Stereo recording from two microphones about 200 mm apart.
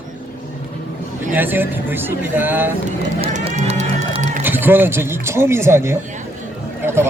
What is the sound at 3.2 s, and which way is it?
Run, 35° right (ahead or behind).